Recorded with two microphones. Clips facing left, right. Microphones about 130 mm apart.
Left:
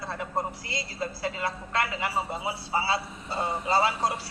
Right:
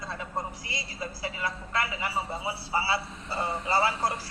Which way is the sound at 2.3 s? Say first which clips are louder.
Left 1 dB; 20° left (ahead or behind).